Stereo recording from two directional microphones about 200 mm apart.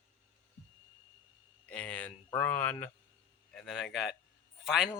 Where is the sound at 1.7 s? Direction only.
5° left (ahead or behind).